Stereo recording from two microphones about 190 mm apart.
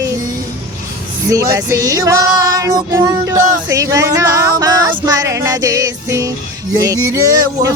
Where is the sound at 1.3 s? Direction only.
15° right (ahead or behind).